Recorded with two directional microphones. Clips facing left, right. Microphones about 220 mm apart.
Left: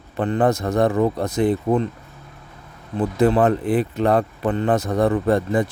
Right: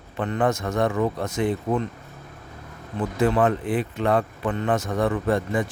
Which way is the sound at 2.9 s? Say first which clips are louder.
Left 4 dB; 35° left (ahead or behind).